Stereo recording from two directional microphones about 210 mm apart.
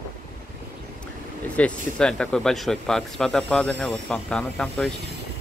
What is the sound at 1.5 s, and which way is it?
Speech, 5° left (ahead or behind).